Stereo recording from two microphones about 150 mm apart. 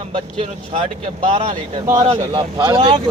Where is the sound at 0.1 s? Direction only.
40° right (ahead or behind).